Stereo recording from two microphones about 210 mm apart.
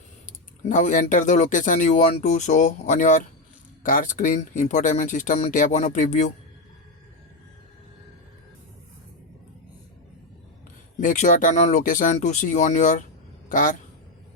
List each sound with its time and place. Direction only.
0.3 s speech: 35° left (ahead or behind)
10.9 s speech: 35° left (ahead or behind)